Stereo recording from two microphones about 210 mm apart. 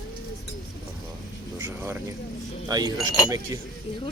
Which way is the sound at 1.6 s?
10° right (ahead or behind).